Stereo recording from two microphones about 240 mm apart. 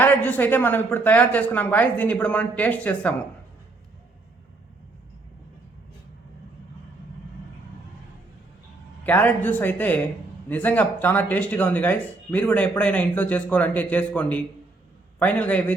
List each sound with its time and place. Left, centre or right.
0.0 s speech: centre
9.0 s a man's voice: centre